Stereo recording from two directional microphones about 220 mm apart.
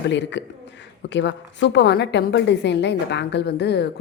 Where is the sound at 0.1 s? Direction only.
55° left (ahead or behind).